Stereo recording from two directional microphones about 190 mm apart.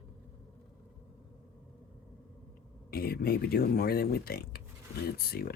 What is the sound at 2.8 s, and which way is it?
Speech, 50° left (ahead or behind).